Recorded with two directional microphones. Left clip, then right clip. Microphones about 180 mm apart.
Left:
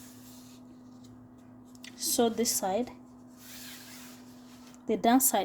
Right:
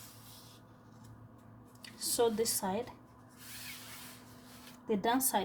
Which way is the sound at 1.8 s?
70° left (ahead or behind).